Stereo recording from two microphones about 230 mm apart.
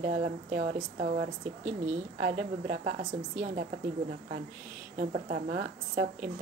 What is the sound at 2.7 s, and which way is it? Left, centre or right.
Speech, right.